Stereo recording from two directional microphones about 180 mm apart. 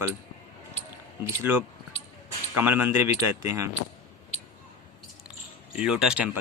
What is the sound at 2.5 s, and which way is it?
Speech, 10° right (ahead or behind).